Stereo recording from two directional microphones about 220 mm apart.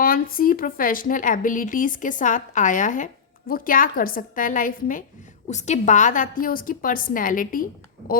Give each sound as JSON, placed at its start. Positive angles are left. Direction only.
{"t": 0.0, "sound": "a woman's voice", "side_deg": 40}